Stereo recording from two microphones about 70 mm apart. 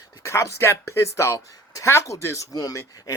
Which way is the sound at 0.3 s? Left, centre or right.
Left.